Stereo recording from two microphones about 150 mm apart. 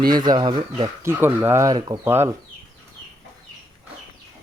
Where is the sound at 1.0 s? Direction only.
15° right (ahead or behind).